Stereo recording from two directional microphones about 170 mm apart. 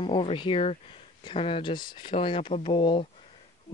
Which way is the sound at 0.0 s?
30° left (ahead or behind).